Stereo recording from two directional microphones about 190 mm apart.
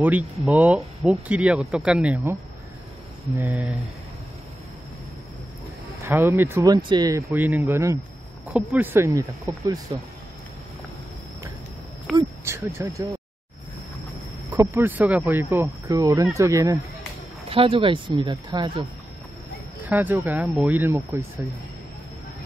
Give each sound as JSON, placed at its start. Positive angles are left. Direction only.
{"t": 0.0, "sound": "speech", "side_deg": -10}
{"t": 3.3, "sound": "speech", "side_deg": -10}
{"t": 6.0, "sound": "speech", "side_deg": -10}
{"t": 12.4, "sound": "speech", "side_deg": -15}
{"t": 14.5, "sound": "speech", "side_deg": -10}
{"t": 17.5, "sound": "speech", "side_deg": -30}
{"t": 19.9, "sound": "speech", "side_deg": -10}